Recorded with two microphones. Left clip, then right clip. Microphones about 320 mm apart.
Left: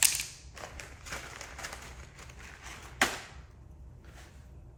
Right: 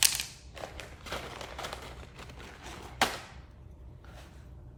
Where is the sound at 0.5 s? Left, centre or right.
Right.